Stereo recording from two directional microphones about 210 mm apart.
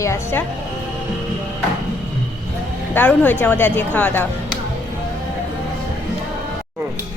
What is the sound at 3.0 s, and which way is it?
A woman's voice, 10° left (ahead or behind).